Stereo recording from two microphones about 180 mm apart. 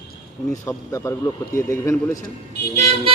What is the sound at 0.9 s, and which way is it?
Speech, 15° left (ahead or behind).